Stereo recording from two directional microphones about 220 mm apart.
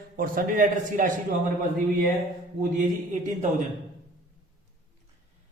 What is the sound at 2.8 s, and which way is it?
Speech, 35° right (ahead or behind).